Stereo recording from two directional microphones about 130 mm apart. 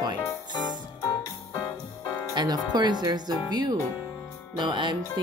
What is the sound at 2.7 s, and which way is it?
Speech, 35° right (ahead or behind).